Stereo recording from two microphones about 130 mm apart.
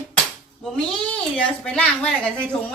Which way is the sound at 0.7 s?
10° left (ahead or behind).